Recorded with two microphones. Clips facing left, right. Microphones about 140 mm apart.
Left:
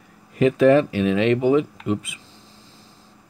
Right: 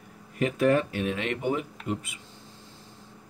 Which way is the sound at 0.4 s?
90° left.